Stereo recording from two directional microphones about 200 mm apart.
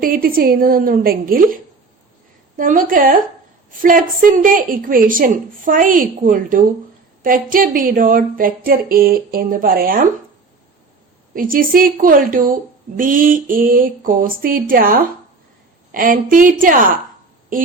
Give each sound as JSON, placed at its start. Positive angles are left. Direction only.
{"t": 0.0, "sound": "a woman's voice", "side_deg": -45}
{"t": 2.6, "sound": "a woman's voice", "side_deg": -45}
{"t": 11.3, "sound": "a woman's voice", "side_deg": -45}